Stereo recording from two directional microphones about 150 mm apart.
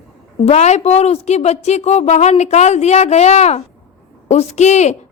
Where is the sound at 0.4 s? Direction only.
45° left (ahead or behind).